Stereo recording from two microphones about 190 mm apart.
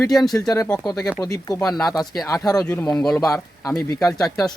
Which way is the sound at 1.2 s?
20° left (ahead or behind).